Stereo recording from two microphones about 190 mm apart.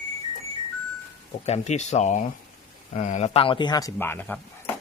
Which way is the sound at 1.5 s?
35° left (ahead or behind).